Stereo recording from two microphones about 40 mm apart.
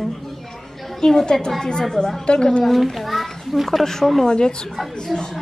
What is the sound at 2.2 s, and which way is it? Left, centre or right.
Speech, left.